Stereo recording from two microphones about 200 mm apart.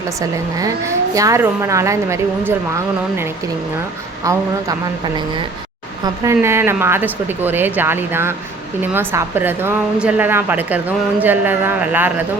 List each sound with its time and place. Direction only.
0.2 s a woman's voice: 15° right (ahead or behind)